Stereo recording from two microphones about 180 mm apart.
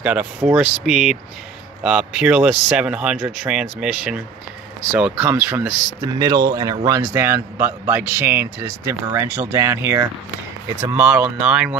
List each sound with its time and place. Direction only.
0.0 s a man's voice: 5° right (ahead or behind)
5.9 s a man's voice: 20° right (ahead or behind); by 11.7 s 5° right (ahead or behind)